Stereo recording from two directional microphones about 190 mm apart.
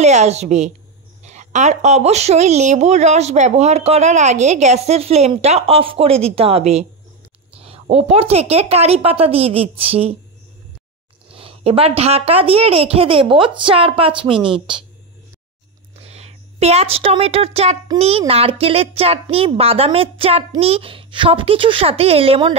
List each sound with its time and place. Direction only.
0.0 s speech: 35° right (ahead or behind)
11.2 s speech: 30° right (ahead or behind)
16.0 s speech: 35° right (ahead or behind)